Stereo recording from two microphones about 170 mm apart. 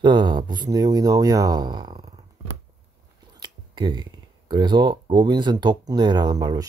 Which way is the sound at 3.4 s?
25° right (ahead or behind).